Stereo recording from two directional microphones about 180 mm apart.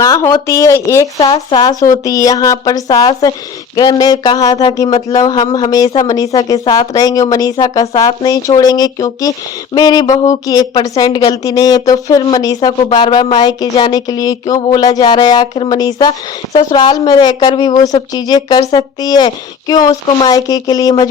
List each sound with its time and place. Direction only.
0.0 s speech: 20° left (ahead or behind)